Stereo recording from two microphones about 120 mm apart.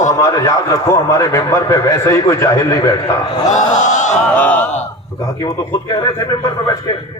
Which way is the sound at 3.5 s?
90° left.